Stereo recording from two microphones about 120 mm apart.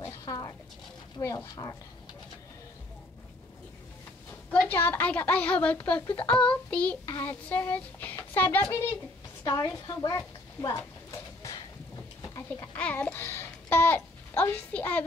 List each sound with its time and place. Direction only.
0.2 s a sound: 30° left (ahead or behind)
1.2 s speech: 30° left (ahead or behind)
4.5 s child singing: 15° left (ahead or behind)
9.4 s a woman's voice: 35° left (ahead or behind)
11.1 s a sound: 30° left (ahead or behind)
12.7 s a child's voice: 10° left (ahead or behind)